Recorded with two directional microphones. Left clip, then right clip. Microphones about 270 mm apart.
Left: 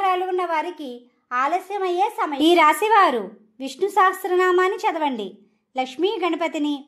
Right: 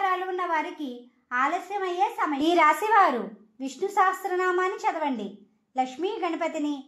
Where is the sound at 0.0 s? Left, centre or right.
Left.